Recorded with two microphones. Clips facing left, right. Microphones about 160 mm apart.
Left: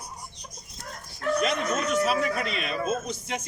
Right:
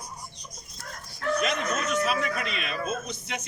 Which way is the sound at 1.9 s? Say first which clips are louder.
Left 3 dB; 35° left (ahead or behind).